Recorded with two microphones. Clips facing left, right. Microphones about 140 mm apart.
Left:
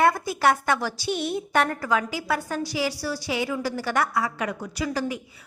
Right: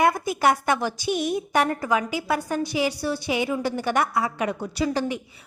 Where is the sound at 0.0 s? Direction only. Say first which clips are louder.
Even; 15° right (ahead or behind).